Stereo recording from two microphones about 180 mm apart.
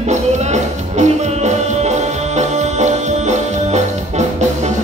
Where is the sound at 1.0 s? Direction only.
40° right (ahead or behind).